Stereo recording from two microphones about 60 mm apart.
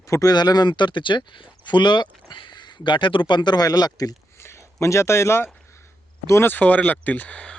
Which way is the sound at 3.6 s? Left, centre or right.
Left.